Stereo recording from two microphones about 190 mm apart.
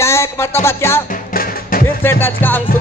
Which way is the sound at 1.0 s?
45° left (ahead or behind).